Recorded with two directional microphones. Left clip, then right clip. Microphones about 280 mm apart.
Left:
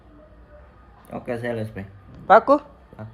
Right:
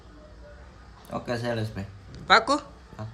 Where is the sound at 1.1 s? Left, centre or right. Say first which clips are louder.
Left 2 dB; right.